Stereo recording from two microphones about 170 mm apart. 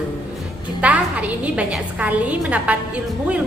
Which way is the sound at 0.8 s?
10° right (ahead or behind).